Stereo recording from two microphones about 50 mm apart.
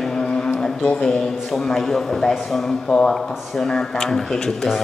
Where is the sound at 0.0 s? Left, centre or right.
Centre.